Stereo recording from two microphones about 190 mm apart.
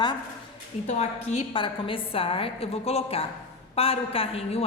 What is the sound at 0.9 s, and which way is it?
A woman's voice, 35° left (ahead or behind).